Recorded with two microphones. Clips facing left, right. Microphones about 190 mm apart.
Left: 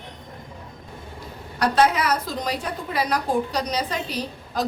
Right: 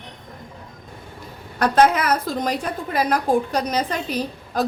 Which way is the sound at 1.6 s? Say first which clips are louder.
Right 3 dB; 50° right (ahead or behind).